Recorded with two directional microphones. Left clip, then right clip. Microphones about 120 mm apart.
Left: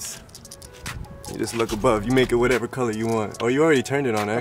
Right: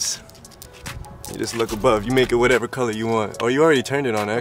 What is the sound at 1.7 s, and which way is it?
Speech, centre (ahead or behind).